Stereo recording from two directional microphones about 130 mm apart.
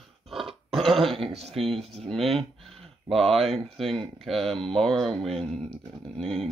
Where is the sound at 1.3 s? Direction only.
50° right (ahead or behind).